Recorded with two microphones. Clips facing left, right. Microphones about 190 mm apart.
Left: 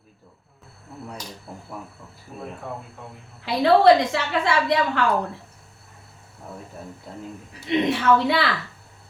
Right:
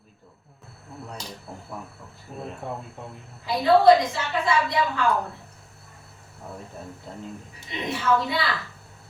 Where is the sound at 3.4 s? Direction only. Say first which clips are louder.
Left 1 dB; 70° left (ahead or behind).